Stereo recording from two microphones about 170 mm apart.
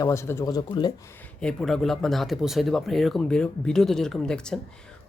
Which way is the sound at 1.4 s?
5° left (ahead or behind).